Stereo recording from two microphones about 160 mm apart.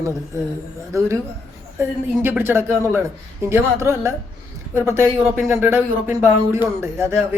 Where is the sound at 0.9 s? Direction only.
20° right (ahead or behind).